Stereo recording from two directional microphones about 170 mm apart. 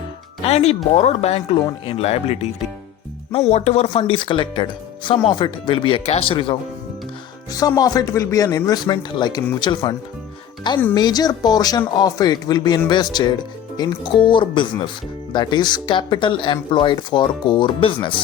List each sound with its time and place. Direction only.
0.4 s speech: 40° left (ahead or behind)
7.8 s speech: 20° left (ahead or behind)
10.9 s speech: 25° left (ahead or behind)